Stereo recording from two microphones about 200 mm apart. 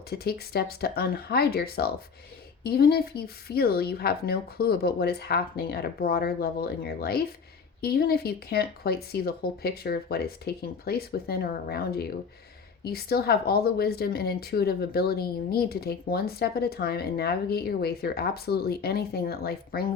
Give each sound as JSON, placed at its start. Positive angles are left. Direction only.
{"t": 0.1, "sound": "speech", "side_deg": 50}